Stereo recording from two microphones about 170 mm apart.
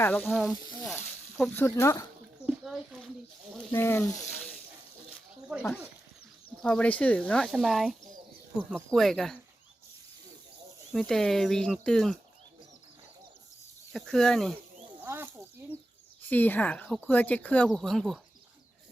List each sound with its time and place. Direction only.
0.0 s speech: 10° left (ahead or behind)
0.3 s speech: centre (ahead or behind)
1.5 s speech: 15° left (ahead or behind)
2.5 s a sound: 5° right (ahead or behind)
3.7 s speech: 15° left (ahead or behind)
5.5 s speech: 10° right (ahead or behind)
6.6 s speech: 5° left (ahead or behind)
10.9 s speech: centre (ahead or behind)
13.9 s speech: centre (ahead or behind)
15.0 s snake: 15° right (ahead or behind)
16.3 s speech: 10° left (ahead or behind)